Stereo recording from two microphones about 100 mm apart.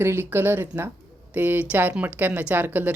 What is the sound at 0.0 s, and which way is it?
Speech, 25° right (ahead or behind).